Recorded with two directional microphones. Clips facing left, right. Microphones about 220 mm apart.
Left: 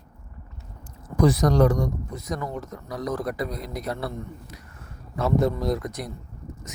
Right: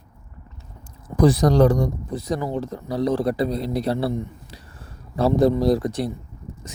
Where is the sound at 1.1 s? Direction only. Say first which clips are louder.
Right 3 dB; 30° right (ahead or behind).